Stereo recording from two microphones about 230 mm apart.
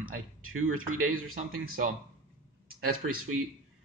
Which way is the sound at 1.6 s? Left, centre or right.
Right.